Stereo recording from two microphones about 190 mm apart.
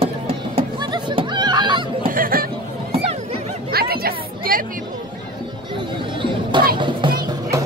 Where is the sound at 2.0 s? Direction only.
50° right (ahead or behind).